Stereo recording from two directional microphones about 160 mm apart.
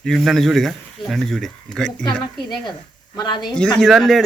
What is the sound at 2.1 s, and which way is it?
A woman's voice, 30° left (ahead or behind).